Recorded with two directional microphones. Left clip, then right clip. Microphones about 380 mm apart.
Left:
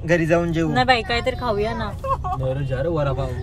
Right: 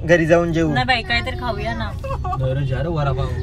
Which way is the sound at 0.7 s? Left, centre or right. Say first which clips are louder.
Even; left.